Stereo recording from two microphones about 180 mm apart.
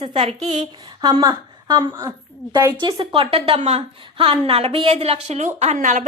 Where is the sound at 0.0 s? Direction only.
30° right (ahead or behind).